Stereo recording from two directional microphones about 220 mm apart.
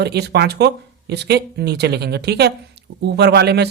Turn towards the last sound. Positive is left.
turn(degrees=-50)  # may be behind; listen again after turning